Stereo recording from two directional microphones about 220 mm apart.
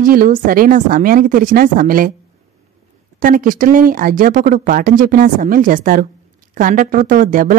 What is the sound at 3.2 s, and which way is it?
A woman's voice, 40° right (ahead or behind).